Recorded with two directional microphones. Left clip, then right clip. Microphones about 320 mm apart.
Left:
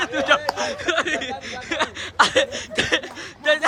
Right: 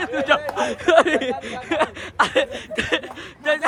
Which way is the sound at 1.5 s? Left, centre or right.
Centre.